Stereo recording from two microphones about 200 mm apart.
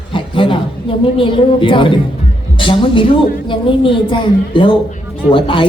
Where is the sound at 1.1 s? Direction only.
25° left (ahead or behind).